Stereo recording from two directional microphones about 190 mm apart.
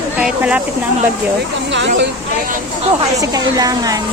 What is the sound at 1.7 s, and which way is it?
Speech, 70° right (ahead or behind).